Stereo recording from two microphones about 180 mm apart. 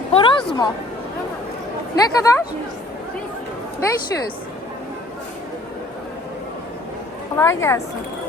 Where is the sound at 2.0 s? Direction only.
20° left (ahead or behind).